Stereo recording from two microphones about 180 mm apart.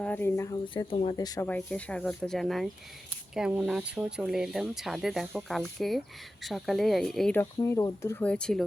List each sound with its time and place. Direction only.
0.0 s speech: 10° left (ahead or behind)
1.5 s speech: 5° left (ahead or behind)
7.6 s speech: 15° left (ahead or behind)